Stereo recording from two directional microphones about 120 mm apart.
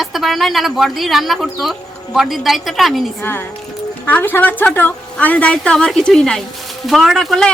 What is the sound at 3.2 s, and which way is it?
A woman's voice, 15° left (ahead or behind).